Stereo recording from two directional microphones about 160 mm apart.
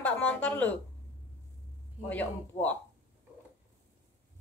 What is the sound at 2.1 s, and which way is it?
Speech, 10° left (ahead or behind).